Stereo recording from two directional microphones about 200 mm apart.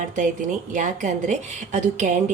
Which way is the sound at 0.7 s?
40° right (ahead or behind).